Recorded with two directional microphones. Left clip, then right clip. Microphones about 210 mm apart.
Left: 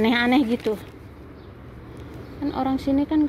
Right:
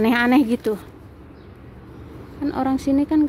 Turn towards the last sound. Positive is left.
turn(degrees=-25)  # may be behind; listen again after turning